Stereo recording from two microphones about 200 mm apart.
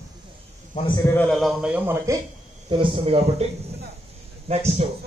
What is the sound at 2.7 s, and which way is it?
Speech, 25° right (ahead or behind).